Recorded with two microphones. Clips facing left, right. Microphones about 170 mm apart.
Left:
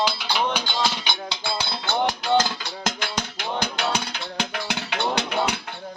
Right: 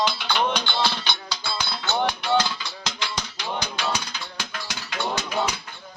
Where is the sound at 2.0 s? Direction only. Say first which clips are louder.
Left 2 dB; 45° left (ahead or behind).